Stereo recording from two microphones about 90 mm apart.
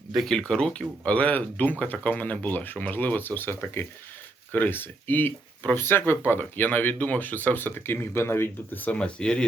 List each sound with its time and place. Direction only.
0.3 s speech: 10° left (ahead or behind)